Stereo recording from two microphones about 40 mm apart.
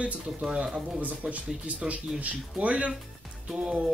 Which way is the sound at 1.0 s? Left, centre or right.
Right.